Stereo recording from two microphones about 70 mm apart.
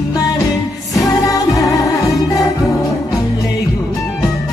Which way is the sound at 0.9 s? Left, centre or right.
Left.